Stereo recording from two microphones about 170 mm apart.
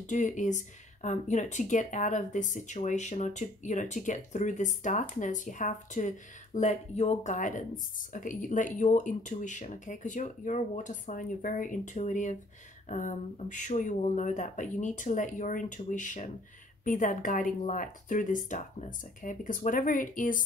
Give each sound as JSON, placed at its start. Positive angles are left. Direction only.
{"t": 0.0, "sound": "speech", "side_deg": 45}